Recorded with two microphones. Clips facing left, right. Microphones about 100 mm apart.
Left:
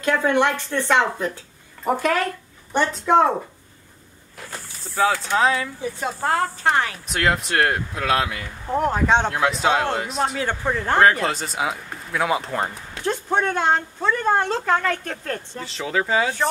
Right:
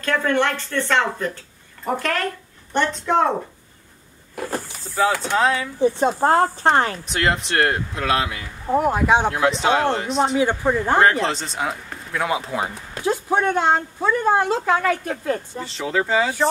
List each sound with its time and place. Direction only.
0.0 s speech: 15° left (ahead or behind)
4.8 s speech: centre (ahead or behind)
5.8 s speech: 30° right (ahead or behind)
7.1 s speech: centre (ahead or behind)
10.3 s speech: 10° right (ahead or behind)
11.1 s speech: 5° left (ahead or behind)